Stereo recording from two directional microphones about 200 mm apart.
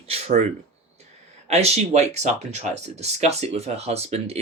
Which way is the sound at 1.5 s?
30° right (ahead or behind).